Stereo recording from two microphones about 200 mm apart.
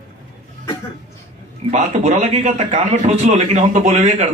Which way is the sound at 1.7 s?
35° right (ahead or behind).